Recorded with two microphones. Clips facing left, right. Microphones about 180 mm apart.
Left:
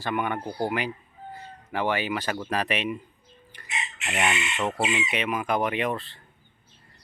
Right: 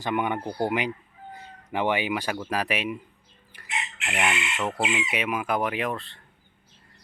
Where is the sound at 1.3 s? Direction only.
15° right (ahead or behind).